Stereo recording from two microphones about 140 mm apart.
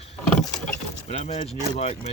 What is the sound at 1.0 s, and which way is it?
Speech, 55° left (ahead or behind).